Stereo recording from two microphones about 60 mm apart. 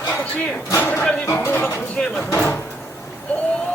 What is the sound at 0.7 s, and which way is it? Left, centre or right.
Speech, left.